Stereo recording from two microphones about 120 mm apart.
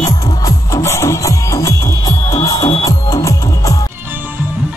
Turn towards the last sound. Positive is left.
turn(degrees=25)  # may be behind; listen again after turning